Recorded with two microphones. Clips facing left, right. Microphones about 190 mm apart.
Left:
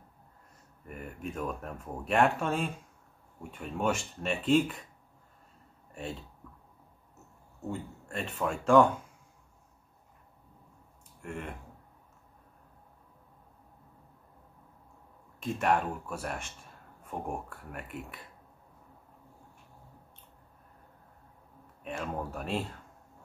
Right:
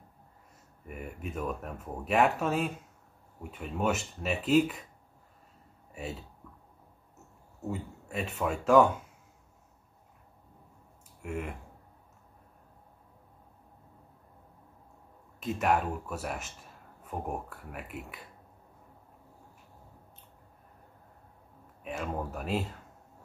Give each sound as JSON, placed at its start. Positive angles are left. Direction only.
{"t": 0.8, "sound": "speech", "side_deg": -5}
{"t": 5.9, "sound": "a sound", "side_deg": -5}
{"t": 7.6, "sound": "speech", "side_deg": -5}
{"t": 11.1, "sound": "speech", "side_deg": -5}
{"t": 15.4, "sound": "speech", "side_deg": -5}
{"t": 21.8, "sound": "speech", "side_deg": -5}